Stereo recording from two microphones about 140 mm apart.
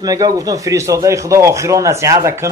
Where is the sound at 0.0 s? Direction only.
25° right (ahead or behind).